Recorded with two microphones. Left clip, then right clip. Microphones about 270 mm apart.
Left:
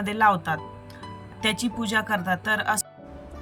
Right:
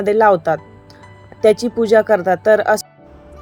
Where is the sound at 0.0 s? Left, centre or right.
Centre.